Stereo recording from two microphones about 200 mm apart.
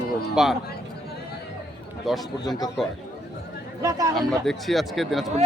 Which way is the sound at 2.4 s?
20° left (ahead or behind).